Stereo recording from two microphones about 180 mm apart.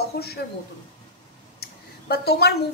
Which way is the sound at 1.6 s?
60° left (ahead or behind).